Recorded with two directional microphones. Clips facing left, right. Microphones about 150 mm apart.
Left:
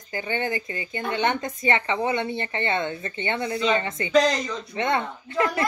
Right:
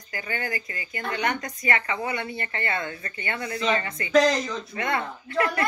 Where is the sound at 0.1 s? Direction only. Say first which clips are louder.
Left 4 dB; 25° left (ahead or behind).